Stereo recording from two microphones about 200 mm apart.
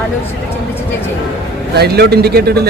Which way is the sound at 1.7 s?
55° right (ahead or behind).